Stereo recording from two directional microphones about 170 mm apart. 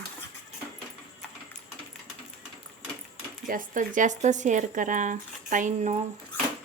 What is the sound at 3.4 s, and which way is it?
Speech, 50° right (ahead or behind).